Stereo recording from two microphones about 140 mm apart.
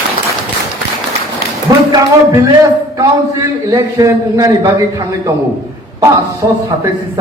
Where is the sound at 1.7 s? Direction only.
25° right (ahead or behind).